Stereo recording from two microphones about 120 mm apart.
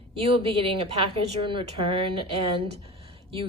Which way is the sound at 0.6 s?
55° right (ahead or behind).